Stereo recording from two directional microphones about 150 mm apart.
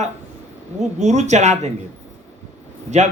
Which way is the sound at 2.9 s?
50° right (ahead or behind).